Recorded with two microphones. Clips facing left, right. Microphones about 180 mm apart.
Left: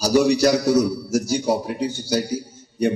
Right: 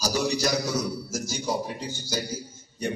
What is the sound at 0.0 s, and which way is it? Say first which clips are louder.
A man's voice: left 10 dB; 70° left (ahead or behind).